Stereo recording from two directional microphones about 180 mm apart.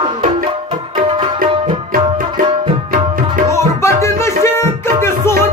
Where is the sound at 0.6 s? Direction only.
25° right (ahead or behind).